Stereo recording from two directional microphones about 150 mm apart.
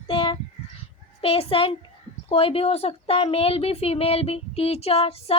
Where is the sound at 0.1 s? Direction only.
35° left (ahead or behind).